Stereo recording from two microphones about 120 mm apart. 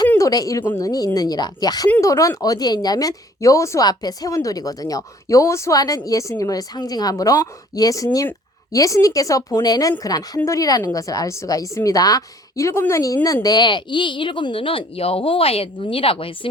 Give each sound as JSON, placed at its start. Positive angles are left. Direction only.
{"t": 0.2, "sound": "a woman's voice", "side_deg": 30}